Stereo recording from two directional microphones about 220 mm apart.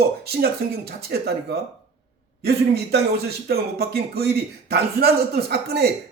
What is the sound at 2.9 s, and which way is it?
A man's voice, 45° right (ahead or behind).